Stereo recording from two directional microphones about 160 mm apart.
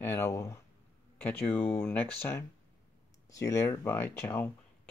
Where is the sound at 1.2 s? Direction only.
10° left (ahead or behind).